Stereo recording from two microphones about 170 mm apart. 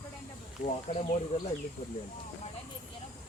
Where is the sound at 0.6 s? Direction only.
55° left (ahead or behind).